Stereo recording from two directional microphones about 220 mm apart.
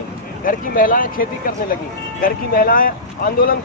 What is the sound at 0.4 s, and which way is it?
Speech, 40° left (ahead or behind).